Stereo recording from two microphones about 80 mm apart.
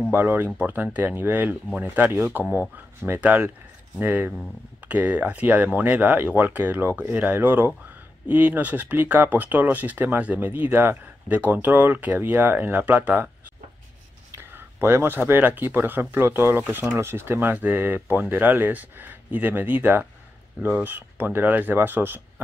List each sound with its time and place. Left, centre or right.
0.1 s speech: right
14.3 s speech: right